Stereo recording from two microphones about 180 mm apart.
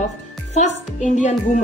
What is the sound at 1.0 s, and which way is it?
Speech, 40° left (ahead or behind).